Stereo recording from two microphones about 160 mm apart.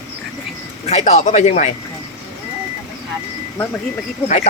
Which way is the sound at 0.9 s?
45° left (ahead or behind).